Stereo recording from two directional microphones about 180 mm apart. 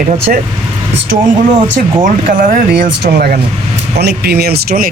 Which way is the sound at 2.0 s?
50° right (ahead or behind).